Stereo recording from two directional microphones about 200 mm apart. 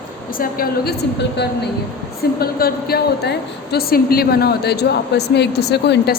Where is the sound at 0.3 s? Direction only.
45° left (ahead or behind).